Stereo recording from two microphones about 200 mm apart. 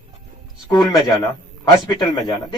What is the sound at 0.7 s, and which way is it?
A man's voice, 20° left (ahead or behind).